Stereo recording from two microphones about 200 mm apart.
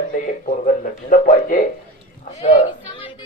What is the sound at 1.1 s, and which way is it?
Speech, 40° left (ahead or behind).